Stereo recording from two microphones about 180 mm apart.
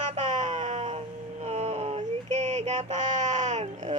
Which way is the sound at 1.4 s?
35° right (ahead or behind).